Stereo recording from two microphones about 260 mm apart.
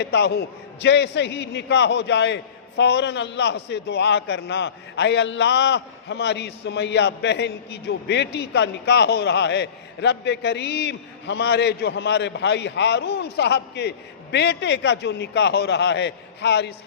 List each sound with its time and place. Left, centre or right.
0.0 s a man's voice: left